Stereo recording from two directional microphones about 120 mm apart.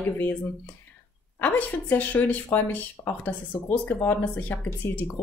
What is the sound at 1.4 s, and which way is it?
Speech, 15° left (ahead or behind).